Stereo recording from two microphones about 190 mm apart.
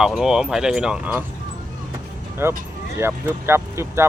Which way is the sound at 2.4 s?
15° right (ahead or behind).